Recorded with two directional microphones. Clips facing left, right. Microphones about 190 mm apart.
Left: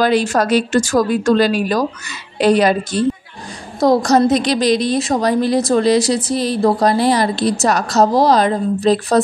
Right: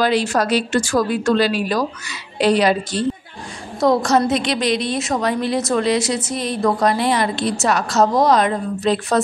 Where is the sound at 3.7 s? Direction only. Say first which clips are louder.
Left 3 dB; 35° left (ahead or behind).